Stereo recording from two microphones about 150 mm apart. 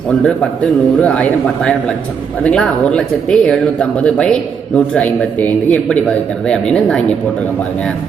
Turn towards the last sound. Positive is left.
turn(degrees=5)  # may be behind; listen again after turning